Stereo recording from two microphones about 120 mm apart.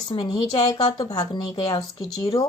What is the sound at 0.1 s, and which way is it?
Speech, 35° left (ahead or behind).